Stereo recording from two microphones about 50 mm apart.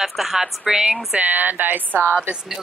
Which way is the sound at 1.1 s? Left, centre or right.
Right.